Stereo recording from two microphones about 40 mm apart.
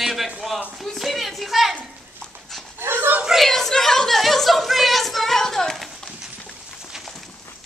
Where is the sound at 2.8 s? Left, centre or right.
Right.